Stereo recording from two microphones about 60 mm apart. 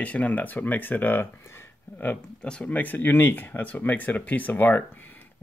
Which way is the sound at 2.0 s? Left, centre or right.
Left.